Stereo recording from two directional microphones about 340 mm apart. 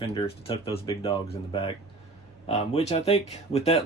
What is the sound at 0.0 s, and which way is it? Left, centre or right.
Speech, centre.